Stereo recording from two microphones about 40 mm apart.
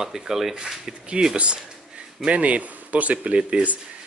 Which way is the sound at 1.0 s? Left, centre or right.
Right.